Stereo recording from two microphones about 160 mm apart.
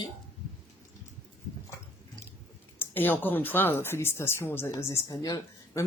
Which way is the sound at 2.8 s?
10° left (ahead or behind).